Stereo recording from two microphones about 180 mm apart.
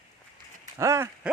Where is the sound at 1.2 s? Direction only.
5° right (ahead or behind).